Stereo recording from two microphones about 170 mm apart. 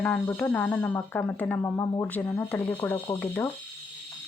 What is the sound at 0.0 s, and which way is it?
Speech, 10° left (ahead or behind).